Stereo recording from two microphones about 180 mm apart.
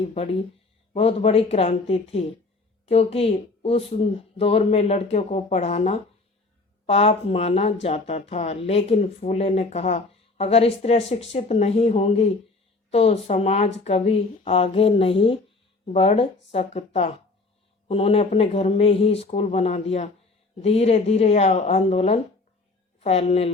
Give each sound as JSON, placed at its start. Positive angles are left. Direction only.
{"t": 0.0, "sound": "speech", "side_deg": 35}